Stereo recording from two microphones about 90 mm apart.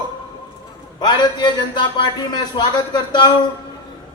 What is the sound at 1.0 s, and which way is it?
Speech, 55° left (ahead or behind).